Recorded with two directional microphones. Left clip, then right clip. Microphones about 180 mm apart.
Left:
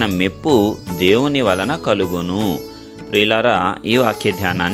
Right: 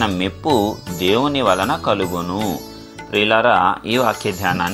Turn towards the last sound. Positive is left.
turn(degrees=50)  # may be behind; listen again after turning